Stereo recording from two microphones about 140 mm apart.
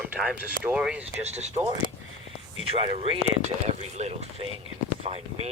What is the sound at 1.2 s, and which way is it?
Speech, 50° right (ahead or behind).